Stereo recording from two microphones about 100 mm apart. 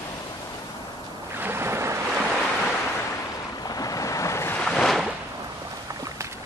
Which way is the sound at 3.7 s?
35° left (ahead or behind).